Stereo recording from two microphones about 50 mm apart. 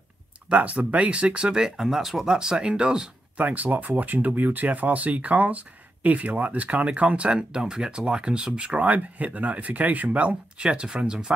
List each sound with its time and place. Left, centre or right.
0.5 s speech: right
1.8 s speech: centre
3.3 s speech: right; by 11.3 s centre